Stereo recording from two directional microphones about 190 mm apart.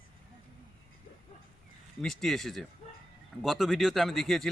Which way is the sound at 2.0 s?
Centre (ahead or behind).